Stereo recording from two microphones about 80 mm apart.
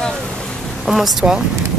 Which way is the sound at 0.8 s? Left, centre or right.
Centre.